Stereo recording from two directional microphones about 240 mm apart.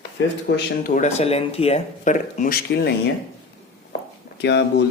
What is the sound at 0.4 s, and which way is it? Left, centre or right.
Speech, left.